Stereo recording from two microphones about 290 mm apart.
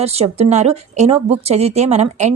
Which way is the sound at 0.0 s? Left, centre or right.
Right.